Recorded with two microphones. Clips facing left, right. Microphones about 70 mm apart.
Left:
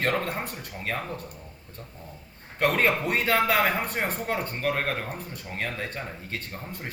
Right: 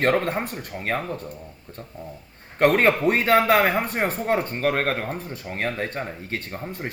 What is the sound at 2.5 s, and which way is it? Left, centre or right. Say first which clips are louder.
Speech: right 5 dB; right.